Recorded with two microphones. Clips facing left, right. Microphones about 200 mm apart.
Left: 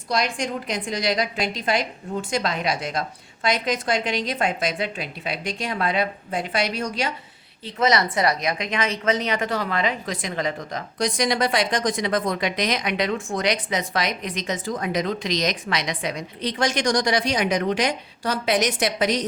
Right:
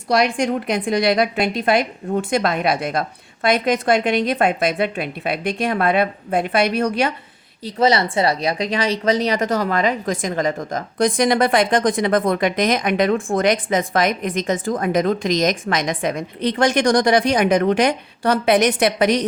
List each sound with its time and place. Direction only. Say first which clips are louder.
0.1 s a woman's voice: right 7 dB; 65° right (ahead or behind)
7.6 s a woman's voice: right 4 dB; 30° right (ahead or behind); by 19.2 s 60° right (ahead or behind)